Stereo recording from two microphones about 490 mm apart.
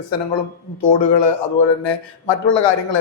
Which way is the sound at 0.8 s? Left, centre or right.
Left.